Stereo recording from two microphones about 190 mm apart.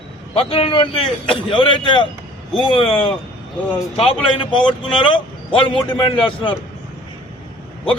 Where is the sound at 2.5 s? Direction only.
Centre (ahead or behind).